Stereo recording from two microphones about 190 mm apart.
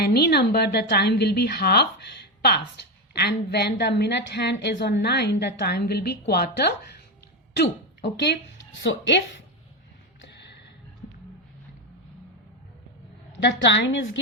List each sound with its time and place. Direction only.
0.0 s a woman's voice: 60° left (ahead or behind)
13.3 s a woman's voice: 70° left (ahead or behind)